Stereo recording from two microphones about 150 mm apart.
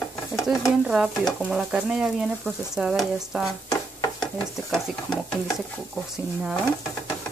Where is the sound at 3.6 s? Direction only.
25° left (ahead or behind).